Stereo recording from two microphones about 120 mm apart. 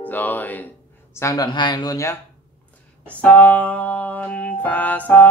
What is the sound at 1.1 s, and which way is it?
Speech, 25° left (ahead or behind).